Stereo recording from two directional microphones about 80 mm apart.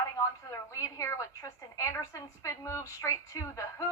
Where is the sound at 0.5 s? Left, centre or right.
Left.